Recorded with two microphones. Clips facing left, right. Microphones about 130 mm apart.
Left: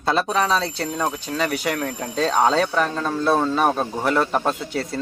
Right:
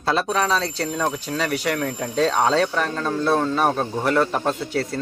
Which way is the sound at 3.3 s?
10° left (ahead or behind).